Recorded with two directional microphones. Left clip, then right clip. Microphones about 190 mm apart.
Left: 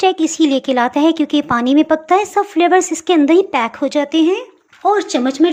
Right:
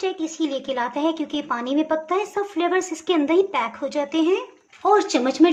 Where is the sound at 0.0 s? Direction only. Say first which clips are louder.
Left 11 dB; 40° left (ahead or behind).